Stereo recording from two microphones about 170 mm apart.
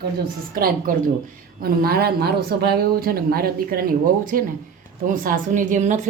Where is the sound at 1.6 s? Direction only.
65° right (ahead or behind).